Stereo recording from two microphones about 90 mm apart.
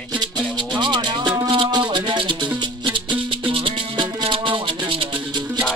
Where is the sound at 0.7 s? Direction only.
60° right (ahead or behind).